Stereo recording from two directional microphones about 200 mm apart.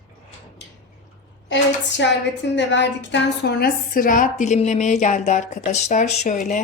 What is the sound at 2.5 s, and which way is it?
A woman's voice, 60° left (ahead or behind).